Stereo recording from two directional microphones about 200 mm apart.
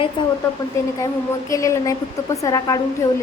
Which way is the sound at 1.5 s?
15° left (ahead or behind).